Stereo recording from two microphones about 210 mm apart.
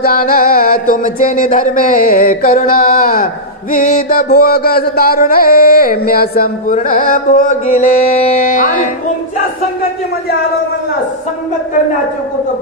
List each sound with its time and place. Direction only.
0.0 s music: 45° left (ahead or behind)